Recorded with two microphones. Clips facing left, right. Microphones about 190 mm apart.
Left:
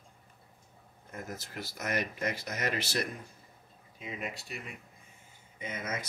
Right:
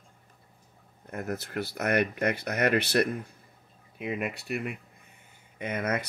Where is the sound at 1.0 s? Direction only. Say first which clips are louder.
Right 8 dB; 60° right (ahead or behind).